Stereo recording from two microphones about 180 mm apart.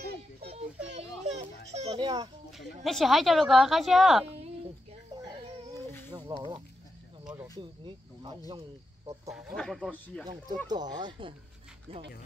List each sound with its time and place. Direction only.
0.8 s children playing: 35° right (ahead or behind)
2.5 s a woman's voice: centre (ahead or behind)
5.9 s a sound: 10° left (ahead or behind)
6.1 s speech: 25° right (ahead or behind)
7.6 s speech: 25° right (ahead or behind)
9.3 s a woman's voice: centre (ahead or behind)
10.7 s speech: 25° right (ahead or behind)